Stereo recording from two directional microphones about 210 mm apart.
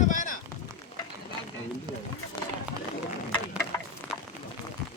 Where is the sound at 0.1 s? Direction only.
40° left (ahead or behind).